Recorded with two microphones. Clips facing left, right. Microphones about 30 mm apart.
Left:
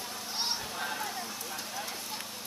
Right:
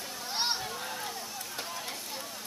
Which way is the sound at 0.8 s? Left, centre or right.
Centre.